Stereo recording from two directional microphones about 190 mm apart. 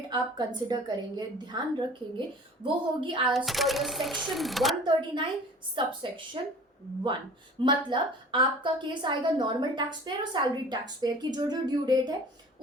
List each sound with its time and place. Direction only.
0.1 s a woman's voice: 20° right (ahead or behind)
2.6 s a woman's voice: 25° right (ahead or behind)
3.3 s speech: centre (ahead or behind)
4.8 s a woman's voice: 25° right (ahead or behind)
7.6 s a woman's voice: 25° right (ahead or behind)